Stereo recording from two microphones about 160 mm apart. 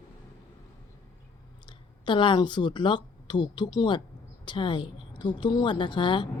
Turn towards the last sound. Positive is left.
turn(degrees=30)  # may be behind; listen again after turning